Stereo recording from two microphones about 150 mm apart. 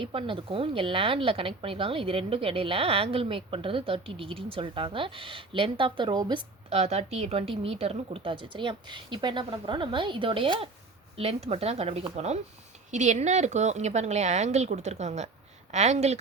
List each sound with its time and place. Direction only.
0.0 s a woman's voice: 35° right (ahead or behind)
6.7 s a woman's voice: 45° right (ahead or behind)